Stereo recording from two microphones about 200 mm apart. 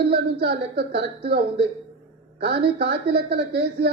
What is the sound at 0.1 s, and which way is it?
Speech, 55° right (ahead or behind).